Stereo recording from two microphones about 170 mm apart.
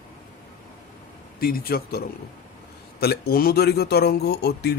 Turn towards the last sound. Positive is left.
turn(degrees=70)  # may be behind; listen again after turning